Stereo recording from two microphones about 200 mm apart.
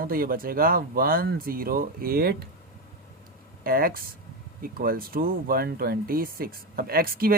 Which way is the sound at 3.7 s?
45° right (ahead or behind).